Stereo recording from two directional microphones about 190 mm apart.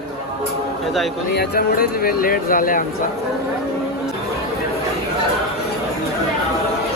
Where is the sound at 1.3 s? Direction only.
55° left (ahead or behind).